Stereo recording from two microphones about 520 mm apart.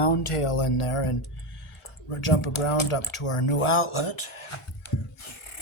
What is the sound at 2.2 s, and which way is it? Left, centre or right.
Speech, left.